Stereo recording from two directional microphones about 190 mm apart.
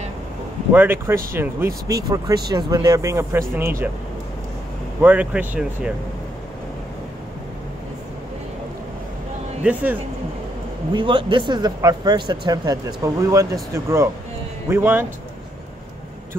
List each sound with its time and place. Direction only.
0.7 s speech: 10° right (ahead or behind)
5.0 s speech: 10° right (ahead or behind)
9.6 s speech: 5° right (ahead or behind)
10.9 s speech: 25° right (ahead or behind)